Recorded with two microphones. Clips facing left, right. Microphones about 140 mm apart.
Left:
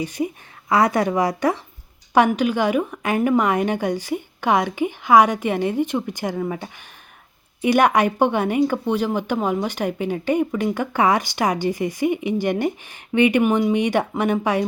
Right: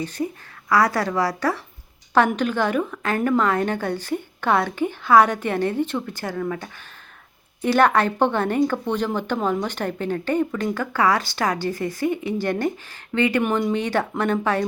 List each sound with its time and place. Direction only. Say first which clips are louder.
0.0 s speech: left 2 dB; 15° left (ahead or behind)